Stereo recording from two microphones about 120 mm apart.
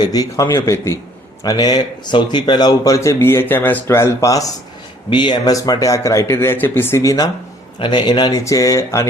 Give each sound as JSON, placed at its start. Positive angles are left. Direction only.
{"t": 0.0, "sound": "speech", "side_deg": 30}
{"t": 5.0, "sound": "speech", "side_deg": 40}
{"t": 7.8, "sound": "speech", "side_deg": 40}